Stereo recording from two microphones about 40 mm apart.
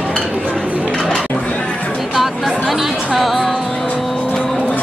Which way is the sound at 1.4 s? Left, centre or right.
Left.